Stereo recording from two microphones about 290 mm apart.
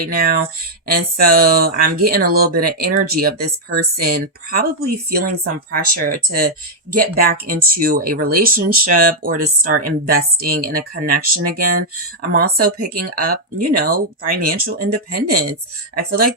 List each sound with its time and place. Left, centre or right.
0.0 s speech: right
5.7 s speech: right